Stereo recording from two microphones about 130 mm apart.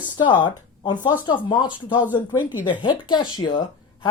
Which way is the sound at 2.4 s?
15° right (ahead or behind).